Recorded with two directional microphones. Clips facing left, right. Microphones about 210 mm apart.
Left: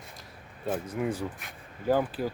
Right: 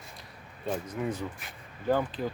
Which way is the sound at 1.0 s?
10° left (ahead or behind).